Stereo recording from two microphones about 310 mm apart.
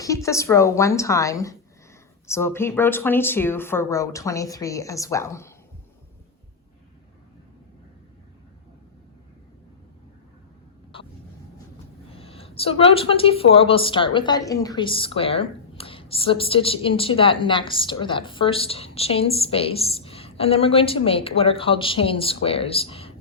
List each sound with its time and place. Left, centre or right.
0.0 s speech: centre
10.9 s a sound: centre
12.1 s speech: centre